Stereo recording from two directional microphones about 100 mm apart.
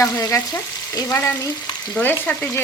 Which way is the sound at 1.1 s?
25° left (ahead or behind).